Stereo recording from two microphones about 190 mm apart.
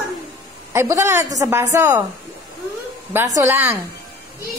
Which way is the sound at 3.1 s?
15° right (ahead or behind).